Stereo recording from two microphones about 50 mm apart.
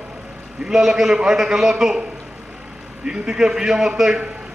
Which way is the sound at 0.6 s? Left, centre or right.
Centre.